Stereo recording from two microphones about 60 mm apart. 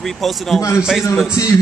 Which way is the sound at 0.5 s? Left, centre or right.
Left.